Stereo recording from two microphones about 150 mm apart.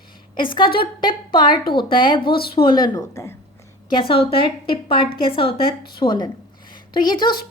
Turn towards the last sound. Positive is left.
turn(degrees=30)  # may be behind; listen again after turning